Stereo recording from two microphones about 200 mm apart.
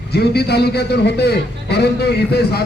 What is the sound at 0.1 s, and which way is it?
A man's voice, 55° left (ahead or behind).